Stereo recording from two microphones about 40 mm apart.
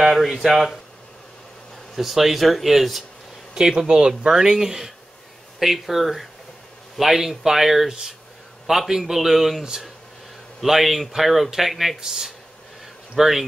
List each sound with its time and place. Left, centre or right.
0.0 s speech: centre
2.0 s speech: centre
3.5 s a man's voice: centre